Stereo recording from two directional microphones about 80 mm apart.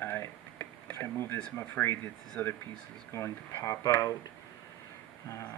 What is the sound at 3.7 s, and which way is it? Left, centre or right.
Speech, left.